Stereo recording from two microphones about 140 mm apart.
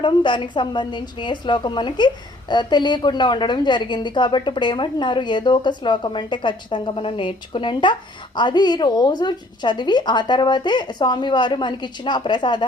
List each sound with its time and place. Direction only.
0.0 s a woman's voice: 35° left (ahead or behind)